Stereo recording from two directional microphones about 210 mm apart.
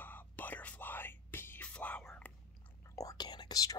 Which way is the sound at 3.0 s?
20° left (ahead or behind).